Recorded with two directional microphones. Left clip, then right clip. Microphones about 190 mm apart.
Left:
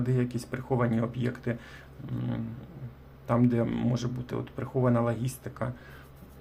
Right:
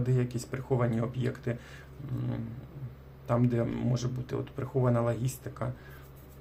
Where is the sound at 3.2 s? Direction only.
15° left (ahead or behind).